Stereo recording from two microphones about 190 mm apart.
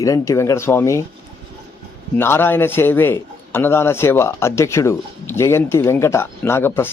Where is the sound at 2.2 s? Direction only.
10° left (ahead or behind).